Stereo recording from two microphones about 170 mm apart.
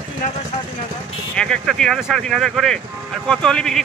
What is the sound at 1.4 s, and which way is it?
Speech, 5° left (ahead or behind).